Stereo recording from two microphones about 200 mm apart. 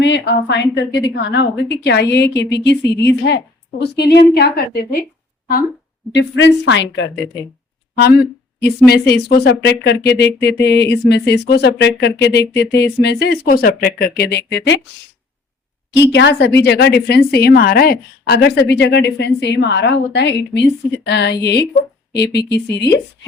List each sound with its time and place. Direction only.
0.0 s a woman's voice: 60° left (ahead or behind)
6.1 s a woman's voice: 60° left (ahead or behind)
7.9 s a woman's voice: 55° left (ahead or behind)
16.0 s a woman's voice: 60° left (ahead or behind)